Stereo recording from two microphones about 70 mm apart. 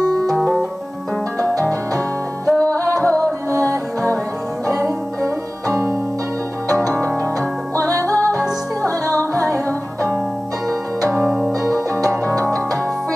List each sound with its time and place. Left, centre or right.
2.5 s music: centre
2.8 s music: right
7.8 s music: right
8.4 s music: left
9.3 s music: right
11.2 s music: centre
11.6 s music: right